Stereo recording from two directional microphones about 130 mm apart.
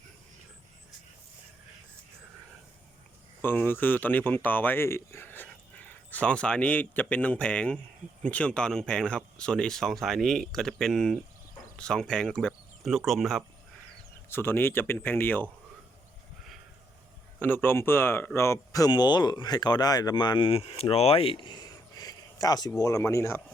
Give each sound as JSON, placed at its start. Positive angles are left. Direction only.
{"t": 3.4, "sound": "speech", "side_deg": 15}
{"t": 14.3, "sound": "speech", "side_deg": 15}
{"t": 17.4, "sound": "speech", "side_deg": 15}